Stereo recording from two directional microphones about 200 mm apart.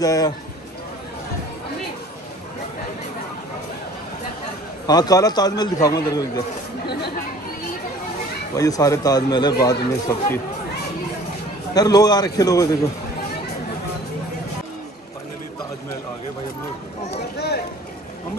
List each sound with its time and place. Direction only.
0.0 s a man's voice: 15° left (ahead or behind)
4.8 s a man's voice: 20° left (ahead or behind)
8.5 s a man's voice: 15° left (ahead or behind)
11.7 s a man's voice: 20° left (ahead or behind)